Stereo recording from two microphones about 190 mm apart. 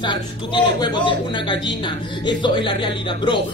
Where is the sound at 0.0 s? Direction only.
25° left (ahead or behind).